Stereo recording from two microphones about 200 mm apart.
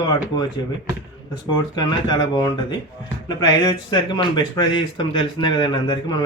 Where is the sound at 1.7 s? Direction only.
20° left (ahead or behind).